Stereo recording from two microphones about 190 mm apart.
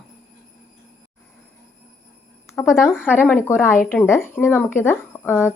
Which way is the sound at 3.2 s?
10° left (ahead or behind).